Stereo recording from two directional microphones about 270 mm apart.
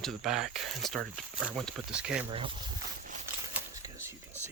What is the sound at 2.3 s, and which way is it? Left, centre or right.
Speech, centre.